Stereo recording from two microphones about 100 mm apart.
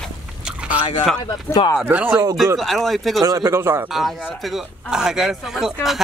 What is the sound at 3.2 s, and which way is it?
Speech, 40° right (ahead or behind).